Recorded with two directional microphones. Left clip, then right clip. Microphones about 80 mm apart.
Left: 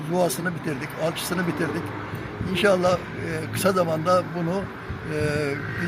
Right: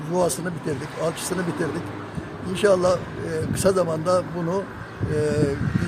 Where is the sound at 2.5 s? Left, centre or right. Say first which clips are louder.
Right 1 dB; right.